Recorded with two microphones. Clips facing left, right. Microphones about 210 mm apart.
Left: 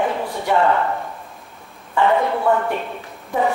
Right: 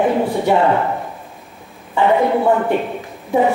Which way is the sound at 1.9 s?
20° right (ahead or behind).